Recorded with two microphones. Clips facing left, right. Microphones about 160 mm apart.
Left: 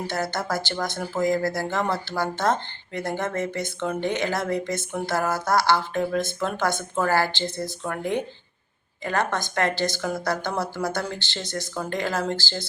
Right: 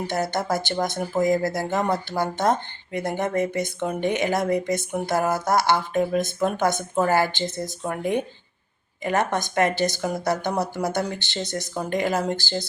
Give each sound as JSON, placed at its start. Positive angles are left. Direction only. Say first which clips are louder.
{"t": 0.1, "sound": "speech", "louder": "right 4 dB", "side_deg": -20}